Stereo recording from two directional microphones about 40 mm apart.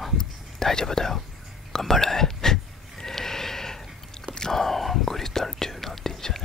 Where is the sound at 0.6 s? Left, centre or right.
Centre.